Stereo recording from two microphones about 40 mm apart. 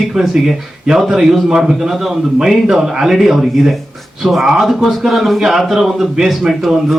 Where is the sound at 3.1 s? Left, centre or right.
Centre.